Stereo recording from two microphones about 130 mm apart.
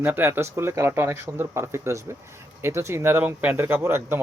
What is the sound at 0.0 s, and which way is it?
Speech, 15° right (ahead or behind).